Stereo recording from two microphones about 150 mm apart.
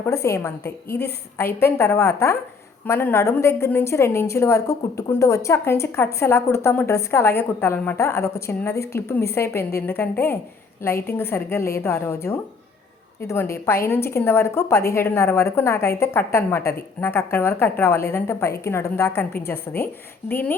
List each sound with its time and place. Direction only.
0.0 s a woman's voice: 20° left (ahead or behind)